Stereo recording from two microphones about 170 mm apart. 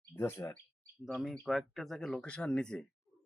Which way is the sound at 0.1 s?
15° left (ahead or behind).